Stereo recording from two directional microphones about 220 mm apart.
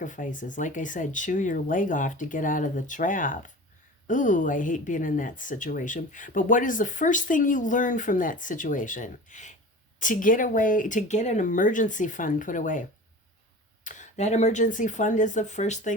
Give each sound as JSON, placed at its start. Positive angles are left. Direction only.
{"t": 0.0, "sound": "a woman's voice", "side_deg": 35}
{"t": 13.8, "sound": "a woman's voice", "side_deg": 30}